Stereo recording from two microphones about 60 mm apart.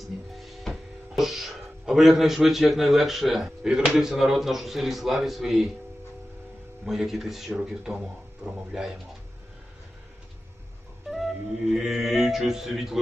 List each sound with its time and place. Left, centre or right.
0.0 s speech: centre
6.8 s speech: centre
8.4 s speech: right
11.7 s mantra: centre